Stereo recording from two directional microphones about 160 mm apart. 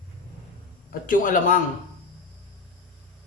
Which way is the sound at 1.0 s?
55° left (ahead or behind).